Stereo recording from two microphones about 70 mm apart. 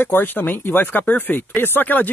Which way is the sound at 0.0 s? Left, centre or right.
Left.